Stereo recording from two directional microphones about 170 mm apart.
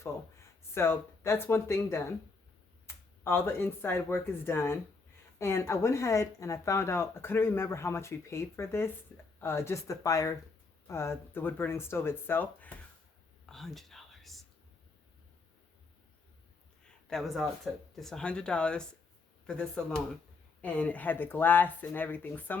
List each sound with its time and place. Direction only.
0.7 s speech: 15° left (ahead or behind)
13.4 s whispering: centre (ahead or behind)
17.1 s speech: centre (ahead or behind)